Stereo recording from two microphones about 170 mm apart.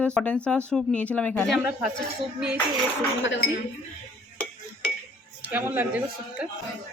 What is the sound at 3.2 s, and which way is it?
Speech, 90° left.